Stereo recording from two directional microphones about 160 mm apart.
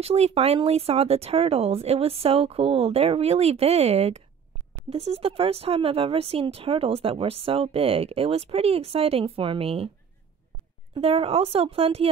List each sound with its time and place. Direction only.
0.0 s speech: 40° right (ahead or behind)
11.0 s speech: 40° right (ahead or behind)